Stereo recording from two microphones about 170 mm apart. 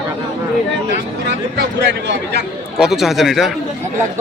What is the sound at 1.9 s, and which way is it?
Speech, 90° right.